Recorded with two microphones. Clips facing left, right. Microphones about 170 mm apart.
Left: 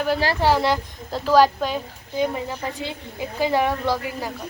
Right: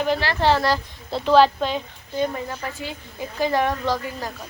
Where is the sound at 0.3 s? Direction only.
10° left (ahead or behind).